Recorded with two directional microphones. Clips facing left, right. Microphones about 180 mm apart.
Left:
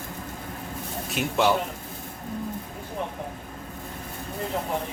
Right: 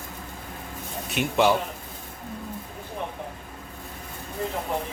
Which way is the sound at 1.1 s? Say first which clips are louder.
Right 2 dB; centre (ahead or behind).